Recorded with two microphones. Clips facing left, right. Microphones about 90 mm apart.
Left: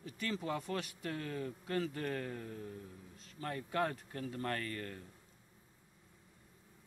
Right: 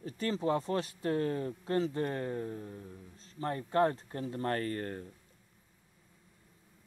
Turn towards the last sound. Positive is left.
turn(degrees=-40)  # may be behind; listen again after turning